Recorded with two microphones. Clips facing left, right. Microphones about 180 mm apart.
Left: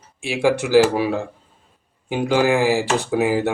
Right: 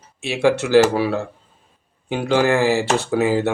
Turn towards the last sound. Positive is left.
turn(degrees=15)  # may be behind; listen again after turning